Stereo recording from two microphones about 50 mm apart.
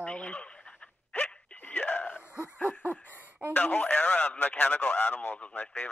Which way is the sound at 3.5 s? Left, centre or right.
Left.